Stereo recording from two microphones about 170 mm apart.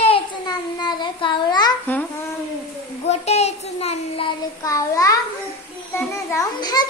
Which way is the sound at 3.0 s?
40° left (ahead or behind).